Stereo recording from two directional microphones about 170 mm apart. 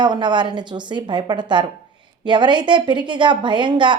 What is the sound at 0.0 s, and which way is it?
A woman's voice, 25° right (ahead or behind).